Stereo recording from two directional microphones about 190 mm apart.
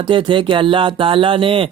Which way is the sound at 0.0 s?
25° right (ahead or behind).